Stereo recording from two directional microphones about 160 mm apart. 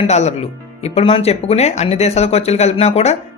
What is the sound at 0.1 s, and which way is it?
Speech, 45° left (ahead or behind).